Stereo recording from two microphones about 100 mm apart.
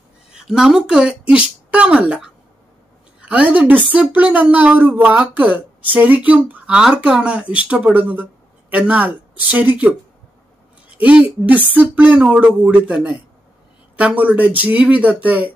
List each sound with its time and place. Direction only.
0.3 s speech: 5° right (ahead or behind)